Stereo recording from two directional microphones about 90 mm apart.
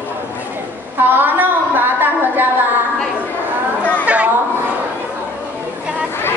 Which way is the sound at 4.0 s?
15° right (ahead or behind).